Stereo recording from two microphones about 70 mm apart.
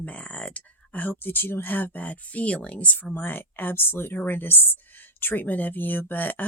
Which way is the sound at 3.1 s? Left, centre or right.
Left.